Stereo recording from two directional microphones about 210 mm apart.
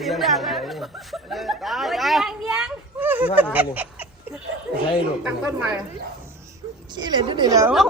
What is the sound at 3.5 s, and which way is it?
Goose, 10° right (ahead or behind).